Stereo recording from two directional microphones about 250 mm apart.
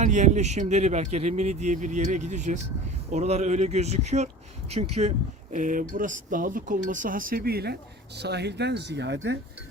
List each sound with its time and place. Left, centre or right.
0.0 s speech: right